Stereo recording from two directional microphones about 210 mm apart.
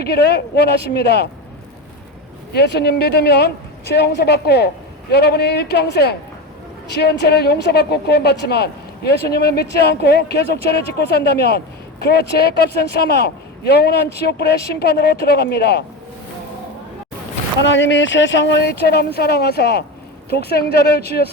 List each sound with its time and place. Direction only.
0.0 s a woman's voice: 50° left (ahead or behind)
2.5 s a woman's voice: 50° left (ahead or behind)
17.6 s a woman's voice: 60° left (ahead or behind)